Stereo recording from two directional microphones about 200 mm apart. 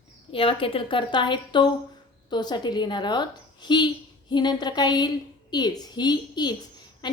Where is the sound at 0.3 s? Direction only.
25° left (ahead or behind).